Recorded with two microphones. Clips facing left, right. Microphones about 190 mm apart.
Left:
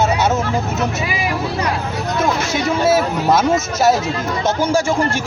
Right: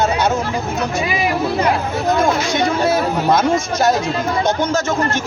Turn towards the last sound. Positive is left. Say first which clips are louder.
# left 1 dB
turn(degrees=10)  # may be behind; listen again after turning